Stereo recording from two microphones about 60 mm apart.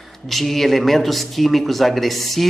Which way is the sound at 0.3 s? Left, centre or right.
Centre.